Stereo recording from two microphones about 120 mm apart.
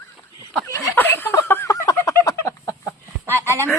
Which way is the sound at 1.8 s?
30° left (ahead or behind).